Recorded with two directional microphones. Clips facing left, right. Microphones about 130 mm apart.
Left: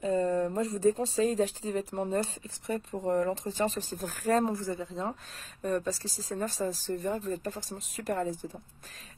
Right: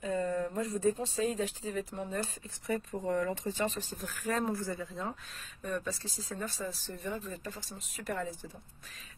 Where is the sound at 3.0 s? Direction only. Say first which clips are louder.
Left 4 dB; 40° left (ahead or behind).